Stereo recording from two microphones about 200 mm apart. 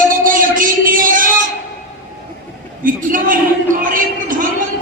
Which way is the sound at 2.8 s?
45° right (ahead or behind).